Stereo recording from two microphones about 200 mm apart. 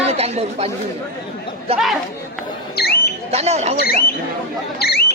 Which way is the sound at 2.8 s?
50° left (ahead or behind).